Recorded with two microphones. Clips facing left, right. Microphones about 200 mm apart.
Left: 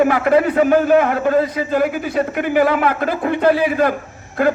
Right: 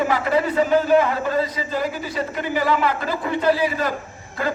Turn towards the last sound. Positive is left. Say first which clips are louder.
# left 8 dB
turn(degrees=55)  # may be behind; listen again after turning